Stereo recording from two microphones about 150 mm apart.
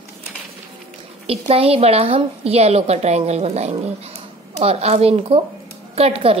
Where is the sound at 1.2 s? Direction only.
40° right (ahead or behind).